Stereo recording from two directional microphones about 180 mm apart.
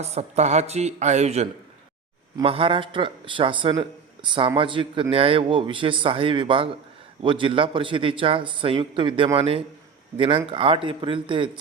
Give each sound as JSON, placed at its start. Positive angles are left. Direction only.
{"t": 0.0, "sound": "a man's voice", "side_deg": -35}